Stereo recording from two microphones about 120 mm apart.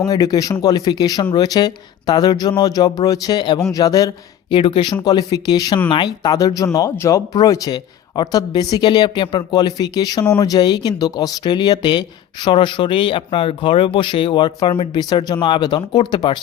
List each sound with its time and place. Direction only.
0.1 s speech: 30° left (ahead or behind)
4.4 s speech: 45° left (ahead or behind)